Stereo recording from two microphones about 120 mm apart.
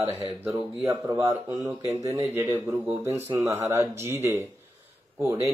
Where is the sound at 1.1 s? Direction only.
20° right (ahead or behind).